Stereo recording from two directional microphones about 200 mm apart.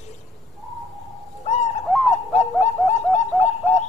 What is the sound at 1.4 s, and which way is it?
Bird, 35° left (ahead or behind).